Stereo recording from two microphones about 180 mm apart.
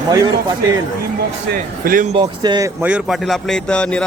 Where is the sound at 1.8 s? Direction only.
45° right (ahead or behind).